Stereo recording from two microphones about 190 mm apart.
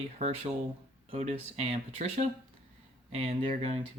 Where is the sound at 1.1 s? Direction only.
35° right (ahead or behind).